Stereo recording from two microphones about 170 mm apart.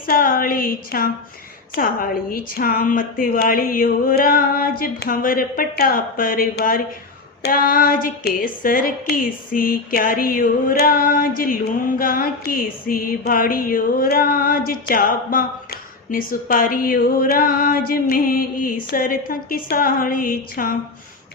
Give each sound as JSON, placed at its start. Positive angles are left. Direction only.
{"t": 0.1, "sound": "speech", "side_deg": 55}